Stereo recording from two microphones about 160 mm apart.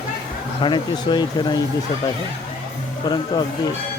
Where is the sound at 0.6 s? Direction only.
30° left (ahead or behind).